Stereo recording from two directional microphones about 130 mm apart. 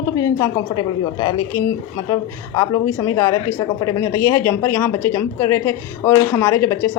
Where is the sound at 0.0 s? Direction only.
25° left (ahead or behind).